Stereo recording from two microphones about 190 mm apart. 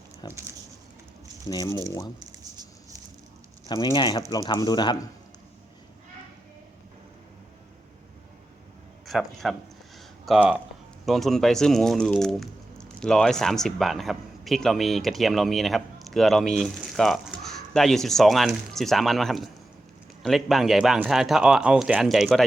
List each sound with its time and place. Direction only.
0.2 s speech: 20° left (ahead or behind)
1.5 s speech: 20° left (ahead or behind)
3.7 s speech: 20° left (ahead or behind)
9.0 s speech: centre (ahead or behind)